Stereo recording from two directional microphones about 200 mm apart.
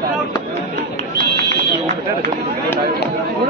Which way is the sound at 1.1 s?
50° right (ahead or behind).